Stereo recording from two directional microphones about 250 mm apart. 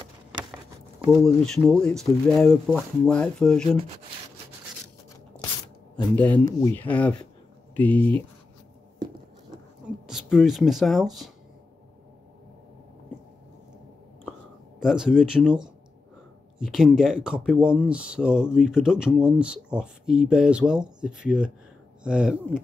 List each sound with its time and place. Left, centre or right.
1.0 s speech: centre
1.4 s speech: centre
6.1 s speech: centre
9.0 s a sound: centre
10.0 s speech: centre
14.8 s speech: centre